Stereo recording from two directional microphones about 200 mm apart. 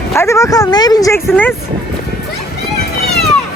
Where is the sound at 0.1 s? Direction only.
15° left (ahead or behind).